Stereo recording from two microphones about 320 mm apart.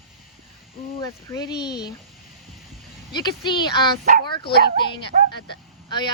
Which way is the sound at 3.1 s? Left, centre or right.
Centre.